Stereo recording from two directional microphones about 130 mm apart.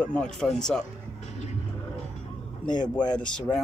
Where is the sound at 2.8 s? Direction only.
35° left (ahead or behind).